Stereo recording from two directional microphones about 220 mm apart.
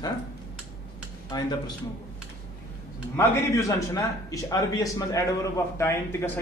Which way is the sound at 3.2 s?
15° left (ahead or behind).